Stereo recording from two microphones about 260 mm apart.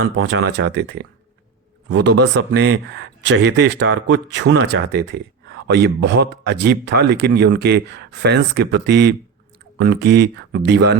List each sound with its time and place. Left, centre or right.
0.0 s speech: right